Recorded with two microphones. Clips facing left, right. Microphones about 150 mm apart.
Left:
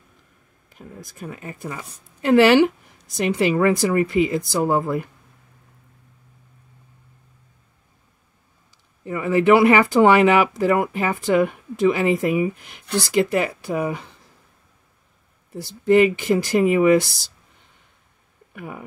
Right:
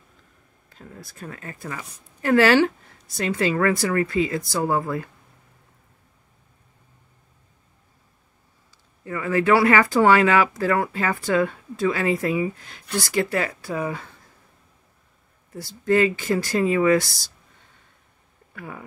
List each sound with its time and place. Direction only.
0.7 s a woman's voice: 15° left (ahead or behind)
9.0 s speech: 20° left (ahead or behind)
15.5 s speech: 20° left (ahead or behind)
18.5 s speech: 15° left (ahead or behind)